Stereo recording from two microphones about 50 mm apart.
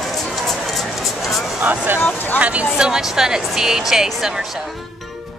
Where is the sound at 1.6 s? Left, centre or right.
Right.